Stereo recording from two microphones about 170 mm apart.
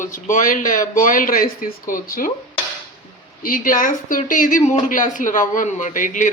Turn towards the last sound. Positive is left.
turn(degrees=50)  # may be behind; listen again after turning